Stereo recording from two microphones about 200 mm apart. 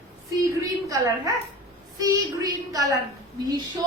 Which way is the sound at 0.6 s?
15° right (ahead or behind).